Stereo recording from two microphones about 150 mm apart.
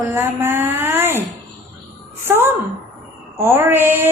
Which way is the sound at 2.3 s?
15° right (ahead or behind).